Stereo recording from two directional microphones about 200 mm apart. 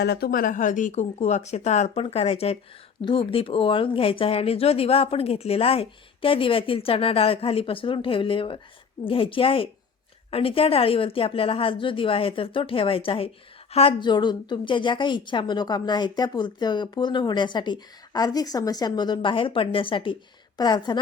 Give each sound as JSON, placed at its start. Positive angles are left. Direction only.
{"t": 0.0, "sound": "speech", "side_deg": 50}